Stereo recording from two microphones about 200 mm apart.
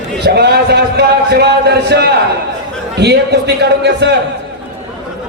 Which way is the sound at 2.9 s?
55° right (ahead or behind).